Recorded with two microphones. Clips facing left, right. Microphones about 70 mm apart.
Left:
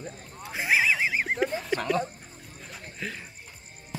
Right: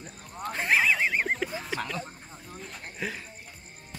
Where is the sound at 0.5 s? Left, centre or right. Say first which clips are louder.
Even; centre.